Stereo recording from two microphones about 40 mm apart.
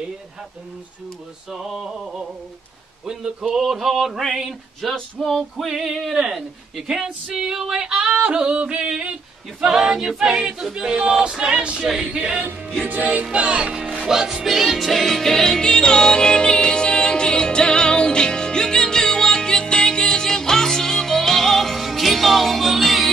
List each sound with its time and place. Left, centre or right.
1.5 s choir: centre
4.2 s a sound: centre
7.4 s yodeling: centre
9.6 s choir: centre
11.1 s yodeling: centre
12.1 s choir: centre
12.8 s music: right
13.2 s yodeling: right
14.0 s music: centre